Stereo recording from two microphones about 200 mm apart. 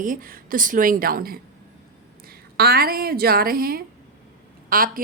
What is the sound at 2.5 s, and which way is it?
A woman's voice, 50° right (ahead or behind).